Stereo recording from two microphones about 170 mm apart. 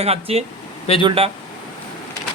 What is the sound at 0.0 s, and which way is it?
Speech, 35° right (ahead or behind).